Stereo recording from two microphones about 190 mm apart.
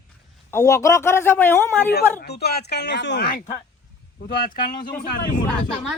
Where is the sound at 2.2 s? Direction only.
55° left (ahead or behind).